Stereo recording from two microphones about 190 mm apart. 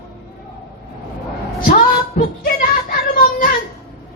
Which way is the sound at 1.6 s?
45° left (ahead or behind).